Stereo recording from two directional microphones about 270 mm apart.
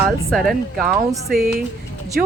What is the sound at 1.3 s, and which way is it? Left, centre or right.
Speech, right.